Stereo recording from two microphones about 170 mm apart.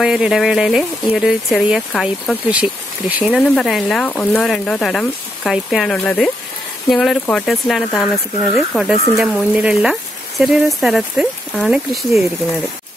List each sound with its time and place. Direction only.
0.0 s speech: 5° right (ahead or behind)
5.9 s speech: 10° left (ahead or behind)